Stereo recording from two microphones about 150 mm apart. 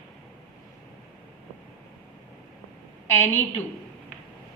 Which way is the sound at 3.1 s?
15° left (ahead or behind).